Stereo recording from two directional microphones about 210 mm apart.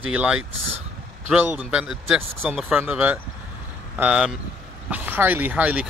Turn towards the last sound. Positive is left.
turn(degrees=-5)  # may be behind; listen again after turning